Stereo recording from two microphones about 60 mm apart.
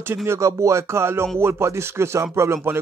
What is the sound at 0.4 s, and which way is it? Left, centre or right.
Speech, right.